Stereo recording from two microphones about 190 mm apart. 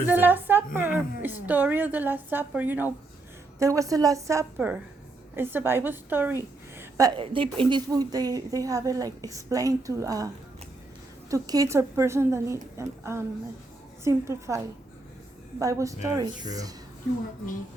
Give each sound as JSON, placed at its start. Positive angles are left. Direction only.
{"t": 0.0, "sound": "a woman's voice", "side_deg": -10}
{"t": 6.7, "sound": "a sound", "side_deg": -15}
{"t": 7.2, "sound": "speech", "side_deg": -25}
{"t": 11.3, "sound": "a woman's voice", "side_deg": -20}